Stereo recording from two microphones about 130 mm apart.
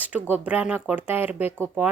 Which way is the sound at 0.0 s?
10° right (ahead or behind).